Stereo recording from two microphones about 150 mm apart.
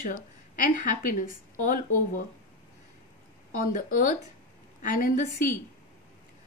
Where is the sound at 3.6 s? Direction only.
65° left (ahead or behind).